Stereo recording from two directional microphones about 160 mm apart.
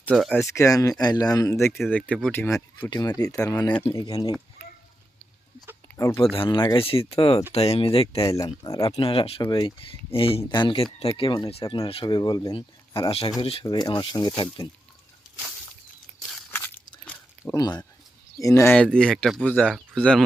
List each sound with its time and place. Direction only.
0.1 s speech: 5° right (ahead or behind)
0.3 s speech: 20° left (ahead or behind)
2.9 s speech: 25° left (ahead or behind)
3.7 s speech: 10° left (ahead or behind)
3.9 s speech: 25° left (ahead or behind)
6.3 s speech: 30° left (ahead or behind)
8.6 s speech: 20° left (ahead or behind)
9.0 s speech: 35° left (ahead or behind)
13.7 s speech: 25° left (ahead or behind)
16.5 s crunch: 10° left (ahead or behind)
18.3 s speech: 20° left (ahead or behind)
18.7 s speech: 5° left (ahead or behind)